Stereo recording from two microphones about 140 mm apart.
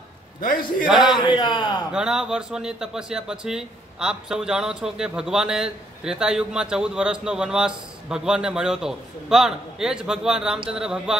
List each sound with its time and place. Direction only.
0.4 s a man's voice: 80° left
1.0 s a man's voice: 35° left (ahead or behind)
1.9 s a man's voice: 5° right (ahead or behind)